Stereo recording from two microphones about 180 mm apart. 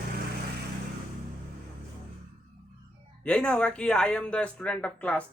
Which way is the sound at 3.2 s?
5° left (ahead or behind).